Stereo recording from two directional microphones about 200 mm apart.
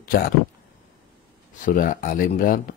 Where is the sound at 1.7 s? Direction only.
45° left (ahead or behind).